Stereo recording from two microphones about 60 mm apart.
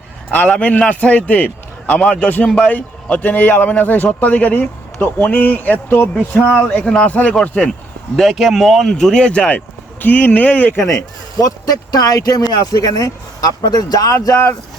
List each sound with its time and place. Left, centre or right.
0.3 s a man's voice: left
7.7 s speech: centre
10.0 s a man's voice: left
10.8 s speech: left
11.3 s speech: left